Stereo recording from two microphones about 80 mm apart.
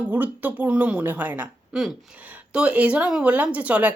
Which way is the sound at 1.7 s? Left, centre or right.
Centre.